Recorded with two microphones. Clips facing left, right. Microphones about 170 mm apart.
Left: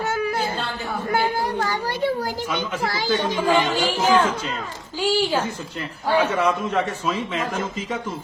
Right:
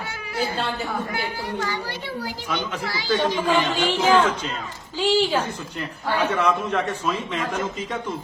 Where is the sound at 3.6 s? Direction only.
10° left (ahead or behind).